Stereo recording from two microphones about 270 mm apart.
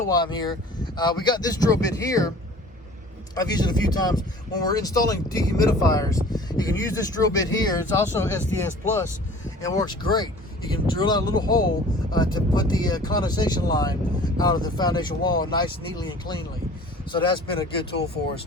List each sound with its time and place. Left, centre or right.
0.1 s speech: centre
3.3 s speech: centre